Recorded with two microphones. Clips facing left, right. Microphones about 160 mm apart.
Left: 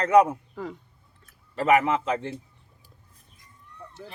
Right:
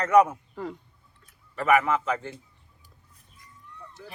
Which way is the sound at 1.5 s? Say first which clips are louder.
Left 1 dB; 30° left (ahead or behind).